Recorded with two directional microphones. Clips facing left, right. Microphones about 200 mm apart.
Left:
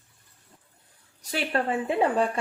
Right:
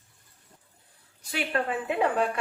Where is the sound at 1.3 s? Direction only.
30° left (ahead or behind).